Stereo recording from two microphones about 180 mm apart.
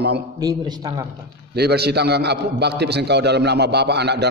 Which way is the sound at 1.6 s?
65° right (ahead or behind).